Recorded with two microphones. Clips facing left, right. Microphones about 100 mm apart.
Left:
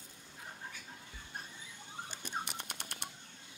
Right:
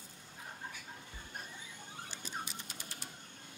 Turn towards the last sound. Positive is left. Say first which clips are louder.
# left 3 dB
turn(degrees=65)  # may be behind; listen again after turning